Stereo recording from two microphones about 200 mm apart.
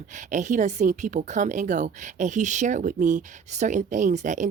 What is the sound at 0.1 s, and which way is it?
Speech, 40° right (ahead or behind).